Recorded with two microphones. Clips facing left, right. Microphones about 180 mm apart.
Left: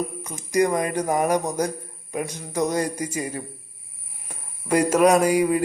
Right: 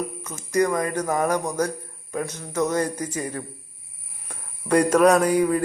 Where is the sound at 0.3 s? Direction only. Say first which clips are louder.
Left 1 dB; 15° left (ahead or behind).